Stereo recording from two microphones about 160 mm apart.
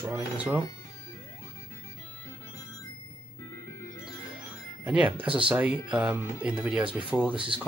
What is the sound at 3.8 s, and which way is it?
Music, 20° left (ahead or behind).